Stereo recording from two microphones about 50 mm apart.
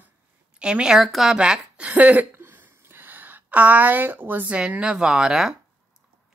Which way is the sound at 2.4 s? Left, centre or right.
Right.